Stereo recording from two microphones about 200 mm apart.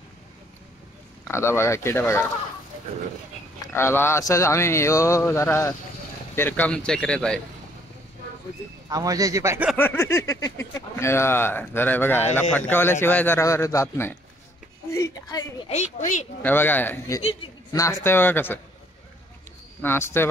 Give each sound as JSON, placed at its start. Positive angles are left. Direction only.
{"t": 1.3, "sound": "speech", "side_deg": 10}
{"t": 3.7, "sound": "speech", "side_deg": 10}
{"t": 8.8, "sound": "speech", "side_deg": -15}
{"t": 9.8, "sound": "speech", "side_deg": 10}
{"t": 14.9, "sound": "a sound", "side_deg": 15}
{"t": 15.7, "sound": "speech", "side_deg": 35}
{"t": 16.4, "sound": "speech", "side_deg": 10}
{"t": 19.8, "sound": "speech", "side_deg": 10}